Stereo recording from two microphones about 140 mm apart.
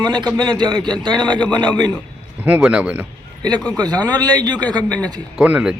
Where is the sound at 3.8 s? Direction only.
30° right (ahead or behind).